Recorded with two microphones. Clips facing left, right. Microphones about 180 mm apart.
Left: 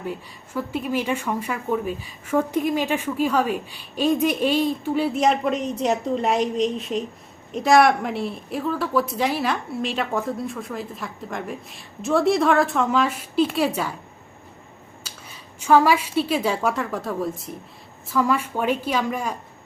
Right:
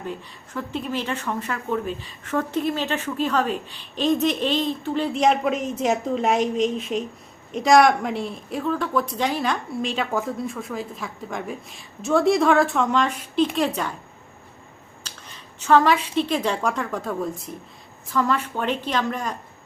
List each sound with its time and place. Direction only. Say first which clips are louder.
0.0 s a woman's voice: left 1 dB; 10° left (ahead or behind)
15.0 s a woman's voice: right 1 dB; 10° left (ahead or behind)